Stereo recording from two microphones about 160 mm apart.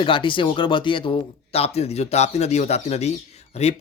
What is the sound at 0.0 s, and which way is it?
Speech, 30° left (ahead or behind).